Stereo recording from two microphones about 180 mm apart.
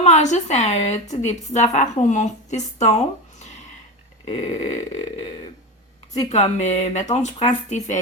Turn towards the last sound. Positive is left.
turn(degrees=40)  # may be behind; listen again after turning